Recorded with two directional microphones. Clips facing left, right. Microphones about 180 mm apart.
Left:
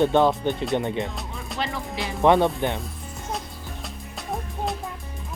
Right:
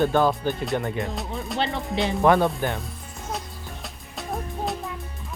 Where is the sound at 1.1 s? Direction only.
Centre (ahead or behind).